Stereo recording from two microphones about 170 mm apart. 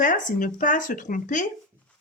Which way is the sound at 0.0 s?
50° left (ahead or behind).